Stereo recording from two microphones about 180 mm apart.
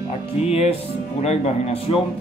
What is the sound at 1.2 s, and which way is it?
Music, 40° left (ahead or behind).